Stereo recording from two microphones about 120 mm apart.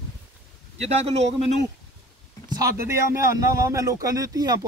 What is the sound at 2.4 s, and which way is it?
A man's voice, 25° right (ahead or behind).